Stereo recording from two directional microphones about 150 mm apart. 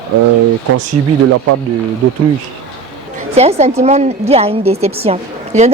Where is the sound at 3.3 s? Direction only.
45° right (ahead or behind).